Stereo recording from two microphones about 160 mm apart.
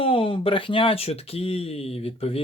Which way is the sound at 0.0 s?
35° left (ahead or behind).